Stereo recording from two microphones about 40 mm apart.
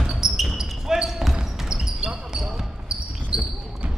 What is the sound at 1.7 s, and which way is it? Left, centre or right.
Basketball bounce, right.